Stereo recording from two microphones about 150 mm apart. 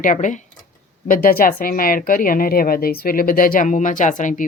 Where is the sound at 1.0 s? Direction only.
70° left (ahead or behind).